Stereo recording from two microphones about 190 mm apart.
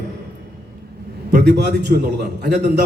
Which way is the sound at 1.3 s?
60° right (ahead or behind).